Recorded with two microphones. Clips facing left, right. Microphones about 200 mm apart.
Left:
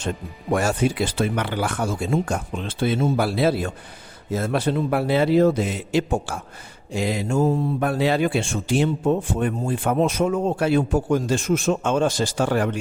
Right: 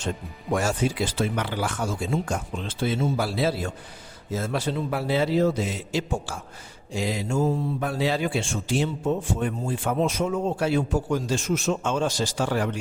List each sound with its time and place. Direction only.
0.5 s speech: 60° left (ahead or behind)